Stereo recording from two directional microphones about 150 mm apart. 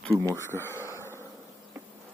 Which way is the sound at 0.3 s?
15° left (ahead or behind).